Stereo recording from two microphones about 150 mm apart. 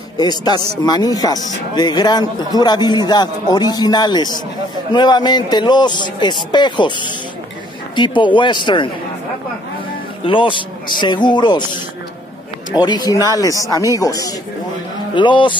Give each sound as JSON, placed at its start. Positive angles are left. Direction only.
{"t": 0.2, "sound": "speech", "side_deg": 30}
{"t": 10.2, "sound": "speech", "side_deg": 35}
{"t": 12.8, "sound": "speech", "side_deg": 25}